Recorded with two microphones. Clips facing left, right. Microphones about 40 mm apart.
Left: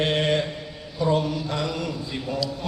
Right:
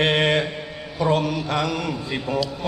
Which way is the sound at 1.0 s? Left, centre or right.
Right.